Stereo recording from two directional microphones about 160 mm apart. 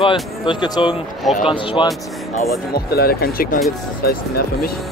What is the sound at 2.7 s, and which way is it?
Speech, 70° left (ahead or behind).